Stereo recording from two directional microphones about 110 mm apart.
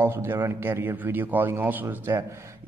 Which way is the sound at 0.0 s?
20° right (ahead or behind).